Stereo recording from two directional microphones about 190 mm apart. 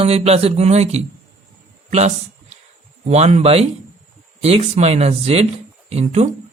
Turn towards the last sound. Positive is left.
turn(degrees=-35)  # may be behind; listen again after turning